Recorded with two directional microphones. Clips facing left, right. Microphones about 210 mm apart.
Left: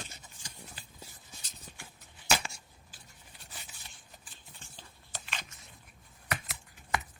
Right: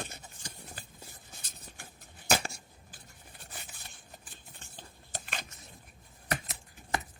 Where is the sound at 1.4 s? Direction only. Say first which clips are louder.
Left 1 dB; 55° right (ahead or behind).